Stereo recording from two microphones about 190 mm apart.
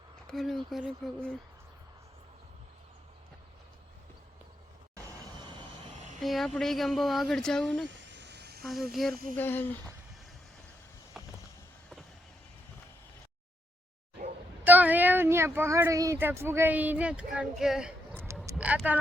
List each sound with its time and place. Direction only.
0.3 s speech: centre (ahead or behind)
5.4 s vehicle: 25° right (ahead or behind)
6.1 s speech: centre (ahead or behind)
7.9 s a sound: 70° right (ahead or behind)
8.6 s speech: centre (ahead or behind)
9.3 s speech: 10° left (ahead or behind)
11.1 s vehicle: centre (ahead or behind)
14.6 s speech: 10° right (ahead or behind)